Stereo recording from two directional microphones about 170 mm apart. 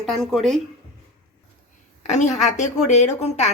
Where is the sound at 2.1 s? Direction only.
45° left (ahead or behind).